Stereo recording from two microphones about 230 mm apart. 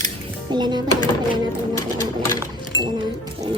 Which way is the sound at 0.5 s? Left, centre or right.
Centre.